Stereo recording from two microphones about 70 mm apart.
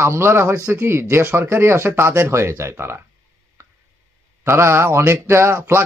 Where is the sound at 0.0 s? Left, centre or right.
Right.